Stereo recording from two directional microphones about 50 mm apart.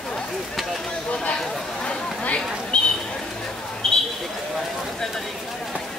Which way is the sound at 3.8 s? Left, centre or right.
Centre.